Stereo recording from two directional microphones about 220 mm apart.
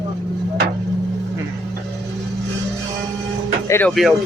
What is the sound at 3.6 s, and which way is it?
Speech, 10° left (ahead or behind).